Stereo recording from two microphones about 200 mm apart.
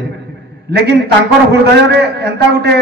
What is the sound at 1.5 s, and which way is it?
A man's voice, 55° right (ahead or behind).